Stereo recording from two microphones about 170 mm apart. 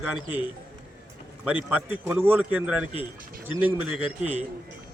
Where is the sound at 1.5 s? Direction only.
10° right (ahead or behind).